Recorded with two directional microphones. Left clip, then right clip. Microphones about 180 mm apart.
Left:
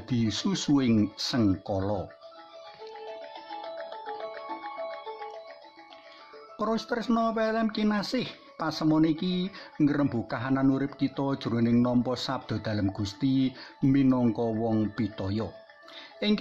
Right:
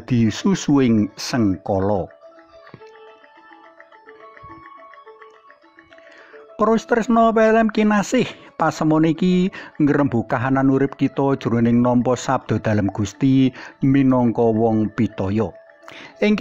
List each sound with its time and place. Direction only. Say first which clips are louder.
0.0 s speech: right 9 dB; 30° right (ahead or behind)
6.5 s speech: right 12 dB; 35° right (ahead or behind)